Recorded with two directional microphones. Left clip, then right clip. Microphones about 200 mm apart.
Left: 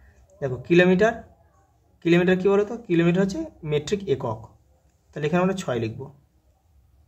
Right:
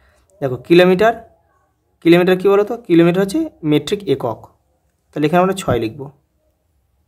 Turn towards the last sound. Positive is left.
turn(degrees=-45)  # may be behind; listen again after turning